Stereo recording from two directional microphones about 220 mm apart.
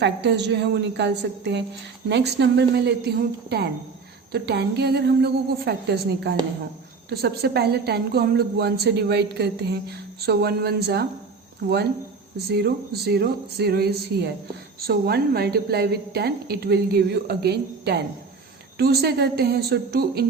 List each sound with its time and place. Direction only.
0.0 s a woman's voice: 50° right (ahead or behind)
12.5 s a woman's voice: 45° right (ahead or behind)